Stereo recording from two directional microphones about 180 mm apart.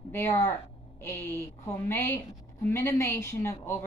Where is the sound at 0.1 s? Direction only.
15° left (ahead or behind).